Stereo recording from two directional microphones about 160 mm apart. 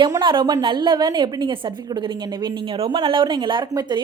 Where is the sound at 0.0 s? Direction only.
30° right (ahead or behind).